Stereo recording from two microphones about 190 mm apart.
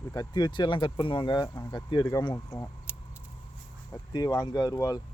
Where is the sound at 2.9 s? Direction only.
10° right (ahead or behind).